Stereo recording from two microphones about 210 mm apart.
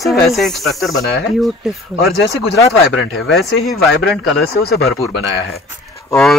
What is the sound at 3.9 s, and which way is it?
Speech, 55° left (ahead or behind).